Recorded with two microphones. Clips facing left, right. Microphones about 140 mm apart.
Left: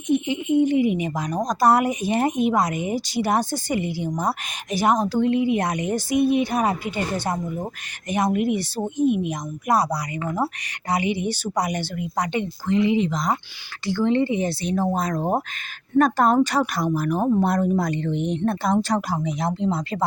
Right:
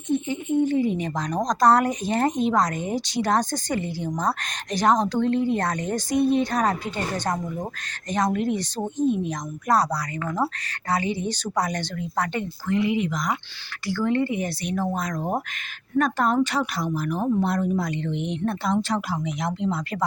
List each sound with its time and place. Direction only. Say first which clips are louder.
0.1 s a woman's voice: left 3 dB; 15° left (ahead or behind)